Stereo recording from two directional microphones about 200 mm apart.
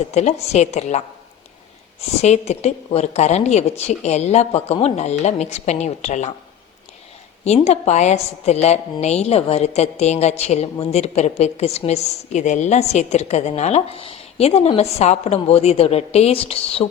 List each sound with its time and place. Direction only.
0.1 s a woman's voice: 35° left (ahead or behind)
2.2 s a woman's voice: 35° left (ahead or behind)
7.4 s a woman's voice: 35° left (ahead or behind)